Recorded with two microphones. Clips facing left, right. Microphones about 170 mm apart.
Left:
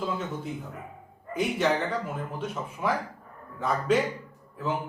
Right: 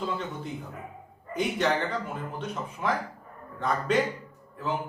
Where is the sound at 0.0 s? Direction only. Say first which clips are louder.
Left 1 dB; centre (ahead or behind).